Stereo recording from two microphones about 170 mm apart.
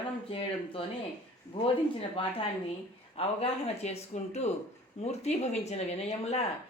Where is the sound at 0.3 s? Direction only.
35° left (ahead or behind).